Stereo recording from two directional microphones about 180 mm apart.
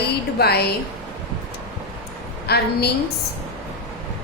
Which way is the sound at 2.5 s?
65° left (ahead or behind).